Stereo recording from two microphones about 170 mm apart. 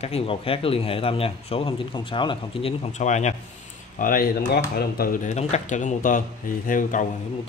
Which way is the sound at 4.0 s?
55° left (ahead or behind).